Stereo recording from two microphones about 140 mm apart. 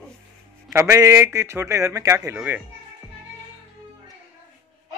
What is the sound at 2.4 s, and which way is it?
Speech, 5° right (ahead or behind).